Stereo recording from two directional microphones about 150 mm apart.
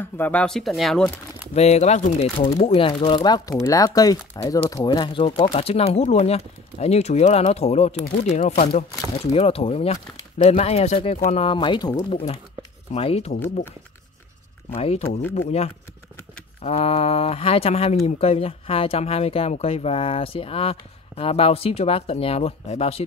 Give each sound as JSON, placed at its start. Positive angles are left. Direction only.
{"t": 0.0, "sound": "speech", "side_deg": 10}
{"t": 1.5, "sound": "speech", "side_deg": 45}
{"t": 3.3, "sound": "speech", "side_deg": 20}
{"t": 5.6, "sound": "speech", "side_deg": 40}
{"t": 14.8, "sound": "speech", "side_deg": 40}